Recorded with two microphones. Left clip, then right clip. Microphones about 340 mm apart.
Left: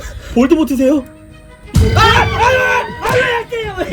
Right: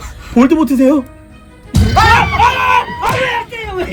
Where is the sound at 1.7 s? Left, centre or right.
Centre.